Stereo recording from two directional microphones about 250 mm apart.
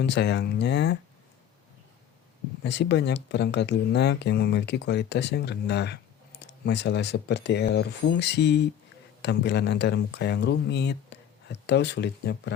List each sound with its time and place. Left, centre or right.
0.0 s speech: left
2.6 s speech: left